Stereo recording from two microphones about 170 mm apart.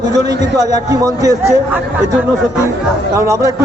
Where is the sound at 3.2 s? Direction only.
20° right (ahead or behind).